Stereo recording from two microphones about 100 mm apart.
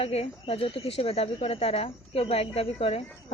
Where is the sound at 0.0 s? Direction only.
85° left.